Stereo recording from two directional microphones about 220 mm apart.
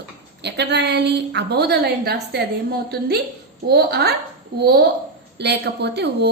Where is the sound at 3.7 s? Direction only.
45° right (ahead or behind).